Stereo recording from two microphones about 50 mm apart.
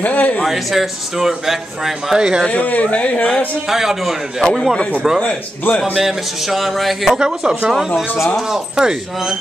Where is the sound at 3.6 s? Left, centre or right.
Centre.